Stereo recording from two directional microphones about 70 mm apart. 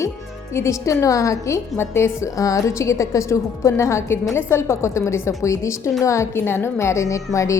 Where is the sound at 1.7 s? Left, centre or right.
Left.